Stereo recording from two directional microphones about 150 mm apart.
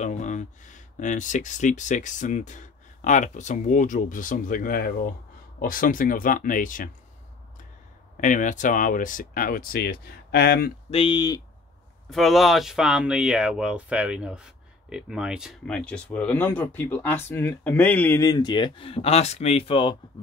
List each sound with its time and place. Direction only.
0.0 s speech: 50° left (ahead or behind)
8.2 s speech: 60° left (ahead or behind); by 10.7 s 90° left
10.9 s speech: 35° left (ahead or behind)
12.1 s speech: centre (ahead or behind); by 20.0 s 35° left (ahead or behind)